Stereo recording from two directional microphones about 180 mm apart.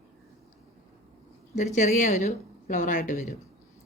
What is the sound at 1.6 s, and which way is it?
Speech, 40° left (ahead or behind).